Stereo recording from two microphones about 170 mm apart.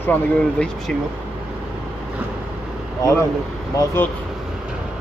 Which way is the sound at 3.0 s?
20° left (ahead or behind).